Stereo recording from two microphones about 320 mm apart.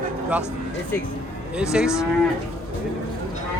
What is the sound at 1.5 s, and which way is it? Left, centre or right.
Speech, centre.